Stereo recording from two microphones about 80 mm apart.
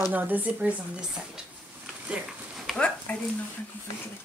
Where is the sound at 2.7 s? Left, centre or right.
Centre.